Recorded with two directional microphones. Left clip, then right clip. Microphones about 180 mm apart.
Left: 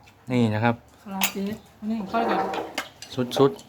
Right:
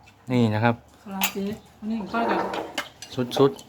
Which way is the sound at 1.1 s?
50° left (ahead or behind).